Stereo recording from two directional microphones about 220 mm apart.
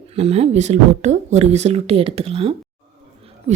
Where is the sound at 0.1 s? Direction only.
30° right (ahead or behind).